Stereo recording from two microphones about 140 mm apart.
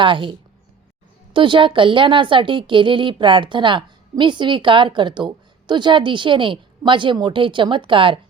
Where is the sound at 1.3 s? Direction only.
35° right (ahead or behind).